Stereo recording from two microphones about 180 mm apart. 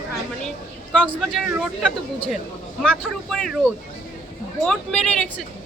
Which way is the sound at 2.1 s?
5° left (ahead or behind).